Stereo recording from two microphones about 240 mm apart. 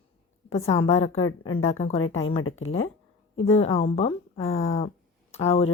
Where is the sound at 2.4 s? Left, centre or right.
Left.